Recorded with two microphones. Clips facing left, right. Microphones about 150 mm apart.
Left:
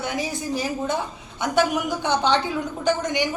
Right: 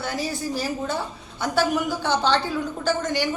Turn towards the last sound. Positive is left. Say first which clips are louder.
# left 1 dB
turn(degrees=15)  # may be behind; listen again after turning